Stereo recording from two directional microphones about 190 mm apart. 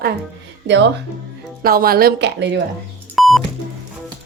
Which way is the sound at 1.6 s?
50° right (ahead or behind).